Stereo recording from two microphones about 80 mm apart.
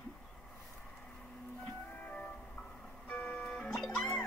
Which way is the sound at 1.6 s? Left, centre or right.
Centre.